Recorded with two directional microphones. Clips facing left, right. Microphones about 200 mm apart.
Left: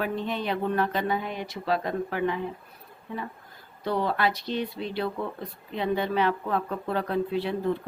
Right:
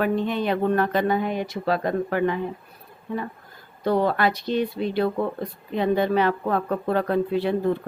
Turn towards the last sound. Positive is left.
turn(degrees=-50)  # may be behind; listen again after turning